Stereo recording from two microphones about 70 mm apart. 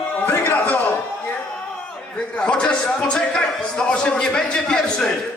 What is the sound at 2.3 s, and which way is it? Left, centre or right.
Speech, centre.